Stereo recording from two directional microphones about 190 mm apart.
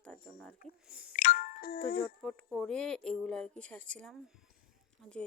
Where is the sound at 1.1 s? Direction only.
45° left (ahead or behind).